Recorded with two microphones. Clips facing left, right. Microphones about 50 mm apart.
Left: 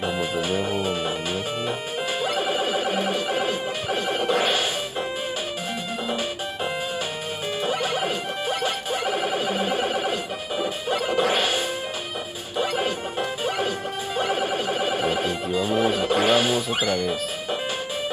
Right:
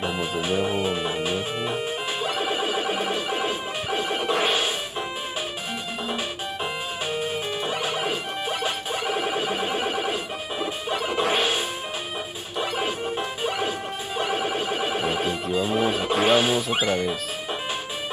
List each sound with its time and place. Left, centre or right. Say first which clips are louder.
0.0 s music: left 1 dB; centre
0.8 s music: even; centre
2.2 s music: left 1 dB; centre; by 4.6 s right
7.6 s music: left 4 dB; centre
9.2 s a sound: left 1 dB; centre
10.6 s music: left 2 dB; centre
13.6 s music: left 1 dB; centre